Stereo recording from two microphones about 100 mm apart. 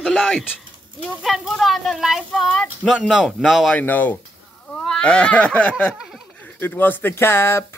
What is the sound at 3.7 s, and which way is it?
Speech, 15° left (ahead or behind).